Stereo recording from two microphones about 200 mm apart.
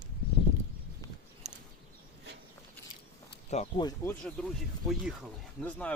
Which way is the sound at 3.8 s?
20° left (ahead or behind).